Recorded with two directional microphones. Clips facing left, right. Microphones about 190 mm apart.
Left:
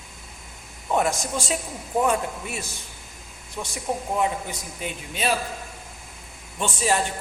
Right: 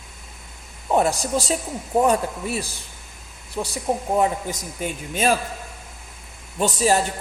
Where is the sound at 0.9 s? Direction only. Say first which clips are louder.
Right 4 dB; 35° right (ahead or behind).